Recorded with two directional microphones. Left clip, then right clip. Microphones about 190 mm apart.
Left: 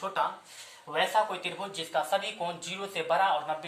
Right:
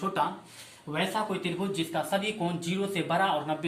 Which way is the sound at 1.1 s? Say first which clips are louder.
Left 3 dB; 30° left (ahead or behind).